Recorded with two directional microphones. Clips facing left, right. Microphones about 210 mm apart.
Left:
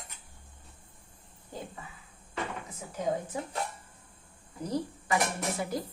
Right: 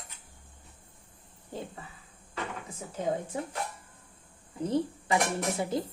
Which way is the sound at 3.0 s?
25° right (ahead or behind).